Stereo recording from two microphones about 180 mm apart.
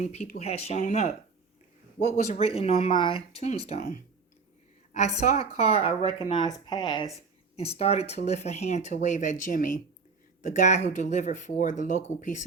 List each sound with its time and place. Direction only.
0.0 s speech: 35° left (ahead or behind)